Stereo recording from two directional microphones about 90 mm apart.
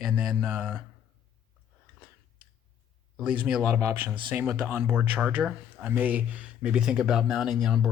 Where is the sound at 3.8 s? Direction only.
25° right (ahead or behind).